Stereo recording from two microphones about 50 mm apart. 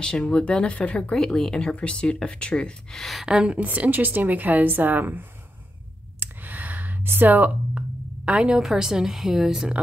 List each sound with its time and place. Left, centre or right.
0.0 s speech: centre
1.1 s speech: centre
1.6 s speech: left
3.0 s speech: centre
3.3 s a woman's voice: right
6.1 s a sound: right
8.3 s a woman's voice: right
8.6 s a woman's voice: centre